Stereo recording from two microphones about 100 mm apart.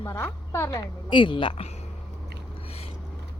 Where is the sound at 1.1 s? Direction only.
55° left (ahead or behind).